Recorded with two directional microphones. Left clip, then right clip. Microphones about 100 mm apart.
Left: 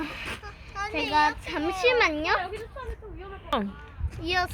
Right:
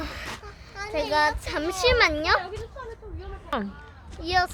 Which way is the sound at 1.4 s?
30° right (ahead or behind).